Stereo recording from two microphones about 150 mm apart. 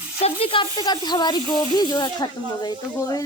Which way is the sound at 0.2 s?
40° left (ahead or behind).